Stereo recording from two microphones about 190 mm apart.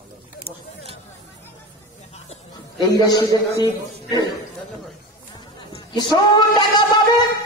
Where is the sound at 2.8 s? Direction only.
20° left (ahead or behind).